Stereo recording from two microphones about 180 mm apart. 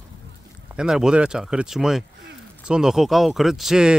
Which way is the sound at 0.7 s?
5° right (ahead or behind).